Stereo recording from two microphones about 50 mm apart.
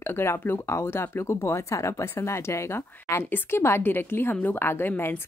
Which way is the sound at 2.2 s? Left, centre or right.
Left.